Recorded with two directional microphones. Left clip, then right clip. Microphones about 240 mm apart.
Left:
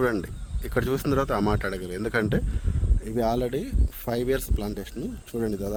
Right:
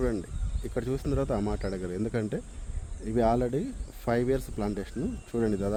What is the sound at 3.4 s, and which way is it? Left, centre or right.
Speech, left.